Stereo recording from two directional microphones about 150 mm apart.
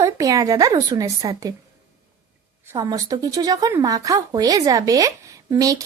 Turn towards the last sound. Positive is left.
turn(degrees=-25)  # may be behind; listen again after turning